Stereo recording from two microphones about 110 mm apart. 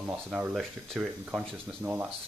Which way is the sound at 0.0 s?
15° right (ahead or behind).